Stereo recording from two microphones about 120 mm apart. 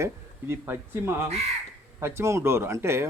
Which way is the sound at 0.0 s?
20° right (ahead or behind).